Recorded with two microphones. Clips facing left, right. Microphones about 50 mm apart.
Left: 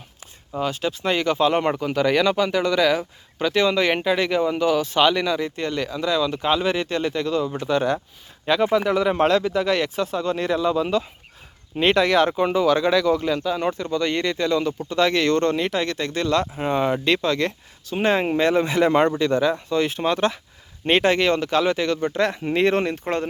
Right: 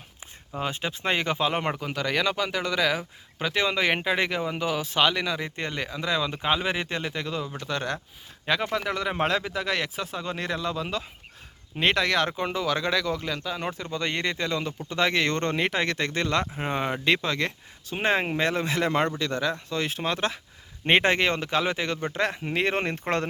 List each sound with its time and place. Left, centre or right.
0.6 s speech: right
1.4 s speech: centre
5.4 s speech: centre
6.4 s speech: centre
7.7 s speech: centre; by 16.5 s right
16.6 s speech: centre
18.3 s speech: centre
19.8 s speech: centre
20.8 s speech: centre
22.8 s speech: right